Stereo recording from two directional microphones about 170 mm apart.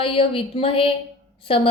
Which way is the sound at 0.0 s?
35° left (ahead or behind).